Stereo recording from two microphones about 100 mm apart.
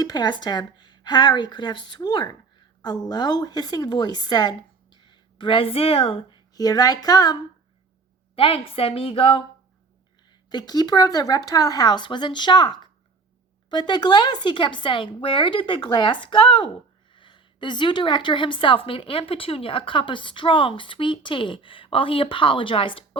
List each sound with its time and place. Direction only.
0.0 s a woman's voice: 40° left (ahead or behind); by 6.4 s 65° left (ahead or behind)
6.5 s speech: 40° left (ahead or behind)
8.4 s a woman's voice: 65° left (ahead or behind)
10.5 s a woman's voice: 40° left (ahead or behind); by 23.0 s 65° left (ahead or behind)